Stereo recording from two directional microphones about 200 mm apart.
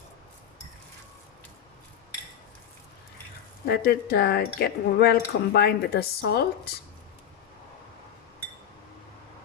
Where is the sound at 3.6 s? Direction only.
50° left (ahead or behind).